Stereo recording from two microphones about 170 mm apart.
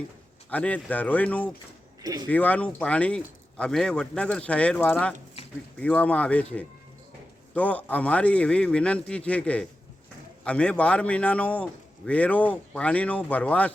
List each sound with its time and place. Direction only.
0.5 s a man's voice: 10° left (ahead or behind)
2.0 s speech: 25° right (ahead or behind)
2.2 s a man's voice: 10° left (ahead or behind)
5.4 s a sound: 35° left (ahead or behind)
5.8 s a man's voice: 10° left (ahead or behind)